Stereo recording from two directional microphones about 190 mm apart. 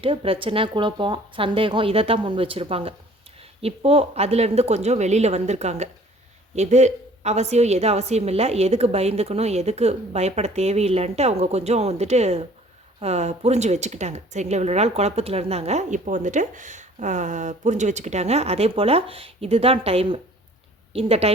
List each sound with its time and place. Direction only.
0.0 s a woman's voice: 30° right (ahead or behind)